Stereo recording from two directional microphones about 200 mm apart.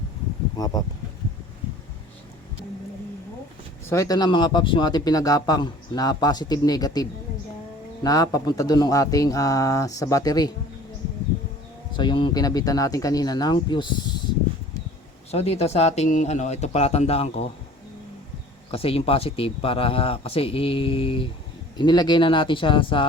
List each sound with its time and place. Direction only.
0.5 s speech: 20° left (ahead or behind)
3.8 s speech: 15° left (ahead or behind)
11.9 s speech: 25° left (ahead or behind)
15.3 s speech: 30° left (ahead or behind)
18.7 s speech: 30° left (ahead or behind)